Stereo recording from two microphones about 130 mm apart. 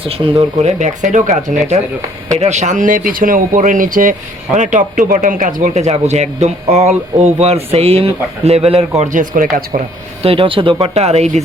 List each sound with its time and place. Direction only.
0.1 s speech: 50° right (ahead or behind); by 4.1 s 90° right
4.5 s speech: 70° right (ahead or behind); by 8.8 s 50° right (ahead or behind)
9.0 s speech: 85° right
10.2 s speech: 45° right (ahead or behind)